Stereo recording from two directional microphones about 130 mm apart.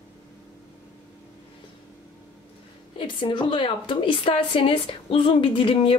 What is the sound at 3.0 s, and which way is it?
A woman's voice, 40° left (ahead or behind).